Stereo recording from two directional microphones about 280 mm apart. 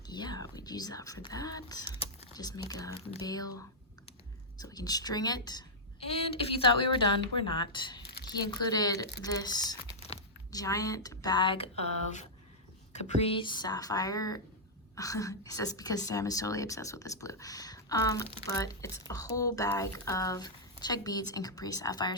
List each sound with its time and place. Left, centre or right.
0.1 s speech: centre
4.6 s a woman's voice: centre
8.0 s a sound: left
8.3 s a woman's voice: centre